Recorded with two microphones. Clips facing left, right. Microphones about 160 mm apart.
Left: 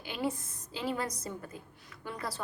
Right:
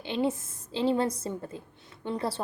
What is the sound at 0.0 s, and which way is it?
A woman's voice, 25° right (ahead or behind).